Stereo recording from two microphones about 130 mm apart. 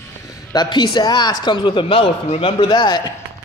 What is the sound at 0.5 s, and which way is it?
Speech, 35° left (ahead or behind).